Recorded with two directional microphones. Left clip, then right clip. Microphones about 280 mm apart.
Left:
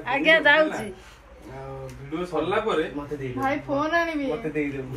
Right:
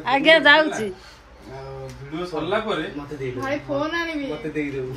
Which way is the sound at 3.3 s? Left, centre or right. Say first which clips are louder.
Even; left.